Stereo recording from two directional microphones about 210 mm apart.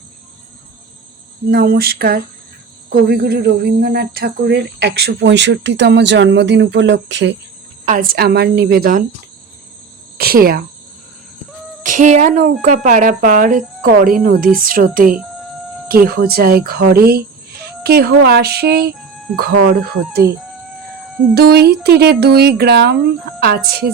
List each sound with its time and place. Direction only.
1.5 s speech: 50° right (ahead or behind)
7.9 s speech: 40° right (ahead or behind)
10.2 s speech: 45° right (ahead or behind)
11.8 s speech: 35° right (ahead or behind)
21.3 s speech: 50° right (ahead or behind)